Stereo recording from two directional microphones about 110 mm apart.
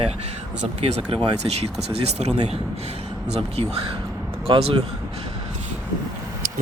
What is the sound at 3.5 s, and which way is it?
Speech, 60° right (ahead or behind).